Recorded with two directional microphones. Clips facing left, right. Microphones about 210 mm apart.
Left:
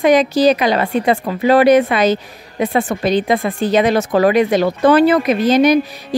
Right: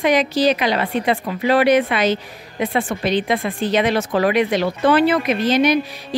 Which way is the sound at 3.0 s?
45° left (ahead or behind).